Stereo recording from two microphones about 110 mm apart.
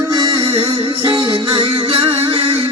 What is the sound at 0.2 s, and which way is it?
Music, 45° right (ahead or behind).